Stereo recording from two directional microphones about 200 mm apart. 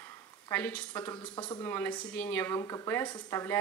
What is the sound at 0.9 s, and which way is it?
A woman's voice, 20° left (ahead or behind).